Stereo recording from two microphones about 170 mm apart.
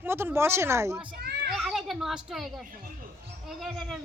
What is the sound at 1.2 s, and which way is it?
Children playing, 70° right (ahead or behind).